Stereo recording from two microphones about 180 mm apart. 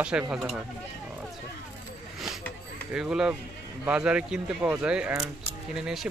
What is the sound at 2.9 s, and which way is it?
Speech, 5° right (ahead or behind).